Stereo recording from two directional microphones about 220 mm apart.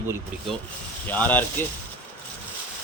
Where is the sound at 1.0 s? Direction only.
10° left (ahead or behind).